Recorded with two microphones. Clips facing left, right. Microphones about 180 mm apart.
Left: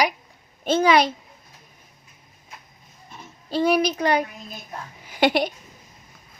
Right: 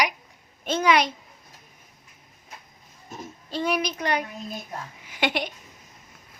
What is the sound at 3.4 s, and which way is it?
Child singing, 35° left (ahead or behind).